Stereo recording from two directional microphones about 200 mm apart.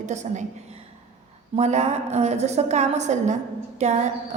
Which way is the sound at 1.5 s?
35° right (ahead or behind).